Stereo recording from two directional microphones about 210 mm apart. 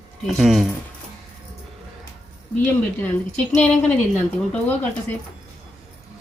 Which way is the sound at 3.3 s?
5° left (ahead or behind).